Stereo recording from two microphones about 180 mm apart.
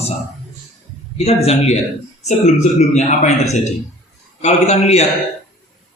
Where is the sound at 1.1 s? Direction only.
35° left (ahead or behind).